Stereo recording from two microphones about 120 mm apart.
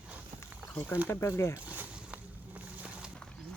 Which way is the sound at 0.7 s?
15° left (ahead or behind).